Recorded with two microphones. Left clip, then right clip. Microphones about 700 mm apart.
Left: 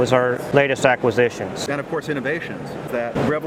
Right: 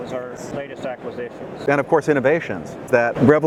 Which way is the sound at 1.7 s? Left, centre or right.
Right.